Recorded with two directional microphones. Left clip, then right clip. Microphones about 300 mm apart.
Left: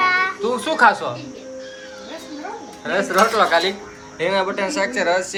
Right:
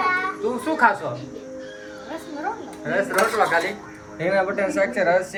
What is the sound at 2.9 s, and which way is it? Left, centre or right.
Speech, centre.